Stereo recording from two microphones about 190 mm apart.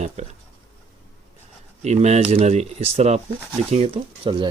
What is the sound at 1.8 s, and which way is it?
Speech, 35° right (ahead or behind).